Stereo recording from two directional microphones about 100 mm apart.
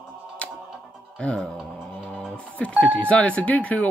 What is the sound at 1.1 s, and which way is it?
Music, 5° left (ahead or behind).